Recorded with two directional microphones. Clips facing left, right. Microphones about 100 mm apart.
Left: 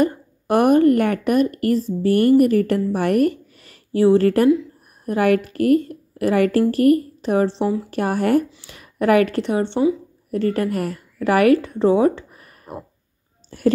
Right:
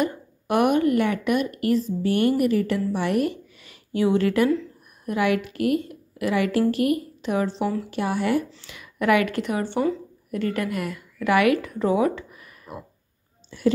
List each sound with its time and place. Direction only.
0.0 s a woman's voice: 40° left (ahead or behind)
7.9 s a woman's voice: 45° left (ahead or behind); by 9.8 s 25° left (ahead or behind)
10.3 s a woman's voice: 35° left (ahead or behind)